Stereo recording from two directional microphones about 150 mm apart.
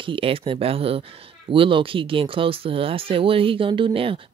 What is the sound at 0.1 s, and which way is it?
Speech, 40° right (ahead or behind).